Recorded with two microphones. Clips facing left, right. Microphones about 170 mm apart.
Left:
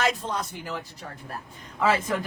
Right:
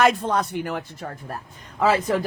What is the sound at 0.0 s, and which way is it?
Speech, 60° right (ahead or behind).